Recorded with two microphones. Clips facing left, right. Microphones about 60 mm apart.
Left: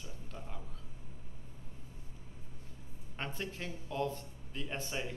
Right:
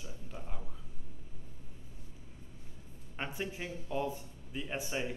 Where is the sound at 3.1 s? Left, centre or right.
Centre.